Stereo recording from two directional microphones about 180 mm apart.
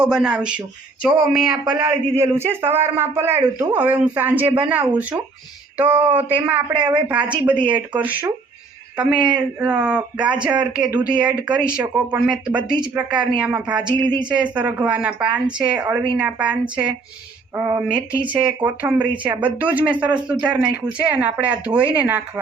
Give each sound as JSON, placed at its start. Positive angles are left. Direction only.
{"t": 0.0, "sound": "a man's voice", "side_deg": -5}
{"t": 6.7, "sound": "speech", "side_deg": -25}
{"t": 7.7, "sound": "a man's voice", "side_deg": -10}
{"t": 14.0, "sound": "speech", "side_deg": -25}
{"t": 14.3, "sound": "a man's voice", "side_deg": -5}